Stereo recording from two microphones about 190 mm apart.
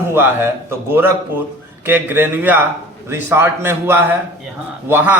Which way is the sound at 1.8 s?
10° right (ahead or behind).